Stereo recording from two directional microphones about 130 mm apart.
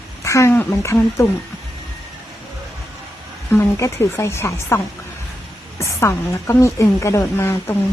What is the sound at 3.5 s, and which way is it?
Speech, 20° left (ahead or behind).